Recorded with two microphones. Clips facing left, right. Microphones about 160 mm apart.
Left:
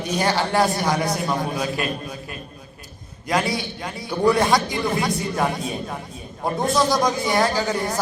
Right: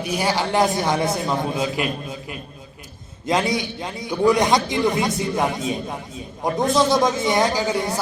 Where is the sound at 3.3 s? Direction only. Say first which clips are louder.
Right 2 dB; 20° right (ahead or behind).